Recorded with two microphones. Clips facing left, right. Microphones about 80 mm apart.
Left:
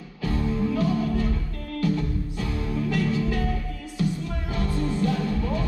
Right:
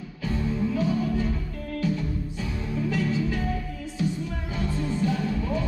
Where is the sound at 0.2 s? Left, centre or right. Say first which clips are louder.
Left 2 dB; left.